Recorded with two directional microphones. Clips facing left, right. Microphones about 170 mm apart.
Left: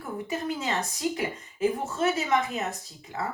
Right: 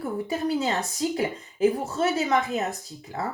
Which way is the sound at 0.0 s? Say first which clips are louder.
Right 5 dB; 35° right (ahead or behind).